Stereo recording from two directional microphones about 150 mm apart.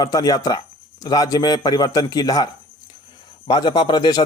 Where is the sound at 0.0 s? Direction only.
25° left (ahead or behind).